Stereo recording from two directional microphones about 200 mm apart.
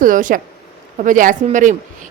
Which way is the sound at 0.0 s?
40° right (ahead or behind).